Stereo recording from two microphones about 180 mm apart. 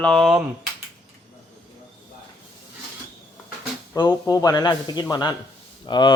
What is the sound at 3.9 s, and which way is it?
Speech, 20° left (ahead or behind).